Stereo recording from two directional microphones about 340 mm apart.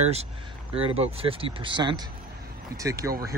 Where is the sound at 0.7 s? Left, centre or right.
Centre.